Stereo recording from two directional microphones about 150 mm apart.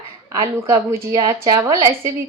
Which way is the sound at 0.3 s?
20° right (ahead or behind).